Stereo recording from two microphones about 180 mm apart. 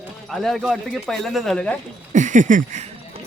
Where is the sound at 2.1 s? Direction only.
45° right (ahead or behind).